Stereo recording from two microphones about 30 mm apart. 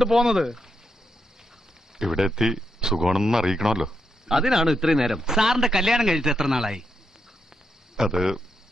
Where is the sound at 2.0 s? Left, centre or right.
Centre.